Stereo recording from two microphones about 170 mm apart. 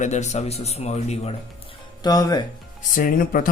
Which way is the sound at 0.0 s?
40° left (ahead or behind).